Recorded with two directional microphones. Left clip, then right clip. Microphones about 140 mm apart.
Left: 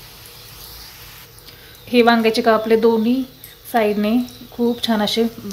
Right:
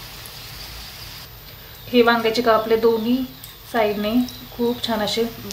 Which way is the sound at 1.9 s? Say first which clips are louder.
Left 2 dB; 75° left (ahead or behind).